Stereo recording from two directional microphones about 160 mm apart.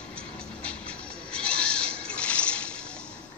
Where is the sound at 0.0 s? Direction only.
5° left (ahead or behind).